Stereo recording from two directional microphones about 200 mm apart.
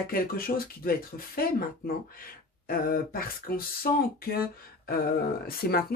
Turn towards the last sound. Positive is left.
turn(degrees=50)  # may be behind; listen again after turning